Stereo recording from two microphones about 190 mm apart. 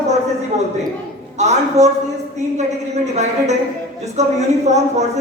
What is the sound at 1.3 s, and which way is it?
Speech, 35° right (ahead or behind).